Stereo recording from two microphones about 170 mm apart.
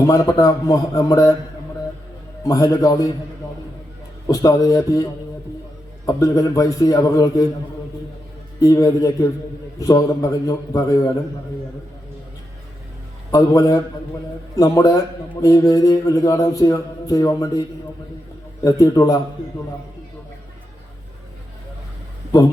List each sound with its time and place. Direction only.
0.1 s a man's voice: 20° left (ahead or behind)
2.4 s a man's voice: 20° left (ahead or behind)
4.3 s a man's voice: 20° left (ahead or behind)
8.6 s a man's voice: 20° left (ahead or behind)
13.3 s a man's voice: 20° left (ahead or behind)
18.6 s a man's voice: 20° left (ahead or behind)